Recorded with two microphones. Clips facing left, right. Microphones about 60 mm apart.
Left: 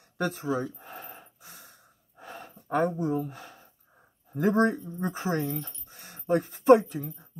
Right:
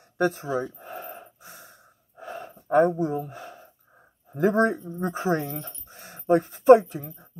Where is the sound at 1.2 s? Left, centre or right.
Centre.